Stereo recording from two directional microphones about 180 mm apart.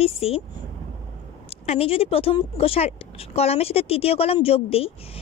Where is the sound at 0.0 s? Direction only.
35° left (ahead or behind).